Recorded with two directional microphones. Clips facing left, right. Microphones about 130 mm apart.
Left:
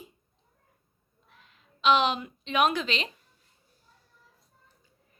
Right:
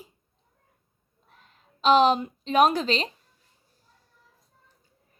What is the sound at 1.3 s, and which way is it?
A woman's voice, 40° right (ahead or behind).